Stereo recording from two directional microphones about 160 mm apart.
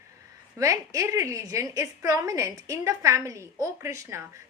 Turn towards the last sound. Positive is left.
turn(degrees=-20)  # may be behind; listen again after turning